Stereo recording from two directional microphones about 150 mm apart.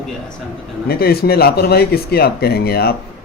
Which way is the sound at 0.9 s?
90° left.